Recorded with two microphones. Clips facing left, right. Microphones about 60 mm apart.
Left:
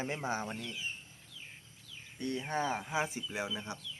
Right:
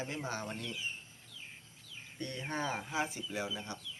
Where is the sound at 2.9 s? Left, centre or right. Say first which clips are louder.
Left 2 dB; centre.